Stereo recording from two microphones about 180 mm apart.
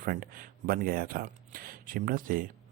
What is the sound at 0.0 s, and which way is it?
Speech, 55° right (ahead or behind).